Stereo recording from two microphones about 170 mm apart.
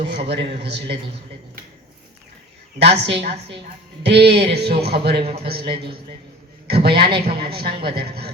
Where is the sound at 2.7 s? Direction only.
85° right.